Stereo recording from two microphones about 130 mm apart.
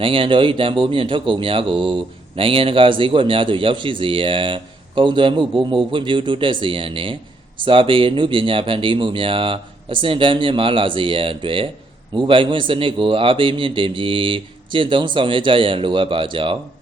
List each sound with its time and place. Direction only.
0.0 s speech: 45° right (ahead or behind)